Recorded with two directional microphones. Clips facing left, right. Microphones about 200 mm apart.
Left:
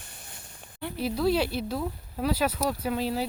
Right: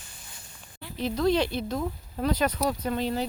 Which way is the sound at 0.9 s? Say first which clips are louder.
Right 1 dB; 5° left (ahead or behind).